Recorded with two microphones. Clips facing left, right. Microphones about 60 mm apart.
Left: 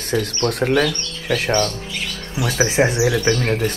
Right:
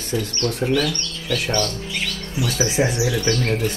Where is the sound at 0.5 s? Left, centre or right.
Left.